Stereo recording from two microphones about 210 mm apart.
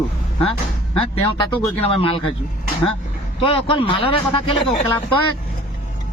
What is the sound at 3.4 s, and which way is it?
Speech, 25° left (ahead or behind).